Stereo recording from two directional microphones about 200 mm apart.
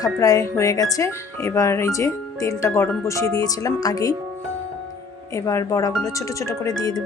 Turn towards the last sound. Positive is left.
turn(degrees=20)  # may be behind; listen again after turning